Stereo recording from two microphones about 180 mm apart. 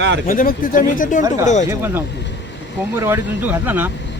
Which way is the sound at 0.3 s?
50° left (ahead or behind).